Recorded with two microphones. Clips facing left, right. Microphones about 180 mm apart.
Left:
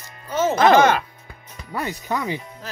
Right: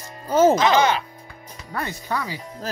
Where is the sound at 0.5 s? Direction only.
55° left (ahead or behind).